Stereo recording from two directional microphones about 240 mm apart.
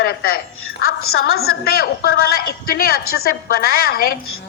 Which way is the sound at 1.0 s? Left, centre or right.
Left.